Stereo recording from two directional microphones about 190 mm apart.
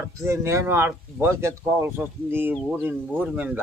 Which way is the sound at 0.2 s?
15° right (ahead or behind).